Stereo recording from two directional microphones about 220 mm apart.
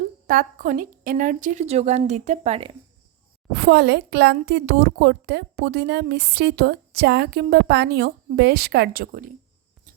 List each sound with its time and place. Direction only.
0.3 s a woman's voice: 40° right (ahead or behind)
3.5 s a woman's voice: 45° right (ahead or behind)